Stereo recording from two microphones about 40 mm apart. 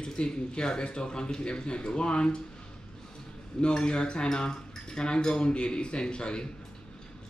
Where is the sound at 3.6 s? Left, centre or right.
Left.